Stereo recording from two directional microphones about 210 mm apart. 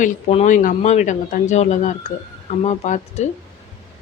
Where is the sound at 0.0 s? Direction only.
35° left (ahead or behind).